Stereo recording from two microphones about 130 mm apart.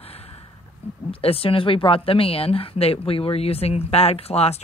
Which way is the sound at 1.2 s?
45° left (ahead or behind).